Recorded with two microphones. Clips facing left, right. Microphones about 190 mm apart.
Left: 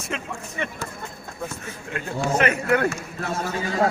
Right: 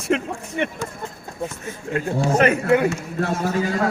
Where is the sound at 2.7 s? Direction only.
15° right (ahead or behind).